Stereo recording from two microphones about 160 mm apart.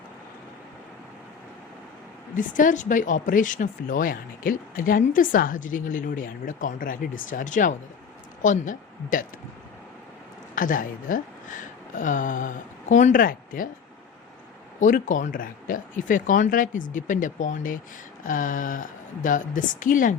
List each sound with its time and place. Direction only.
2.3 s speech: 55° left (ahead or behind)
10.5 s speech: 55° left (ahead or behind)
14.8 s speech: 50° left (ahead or behind)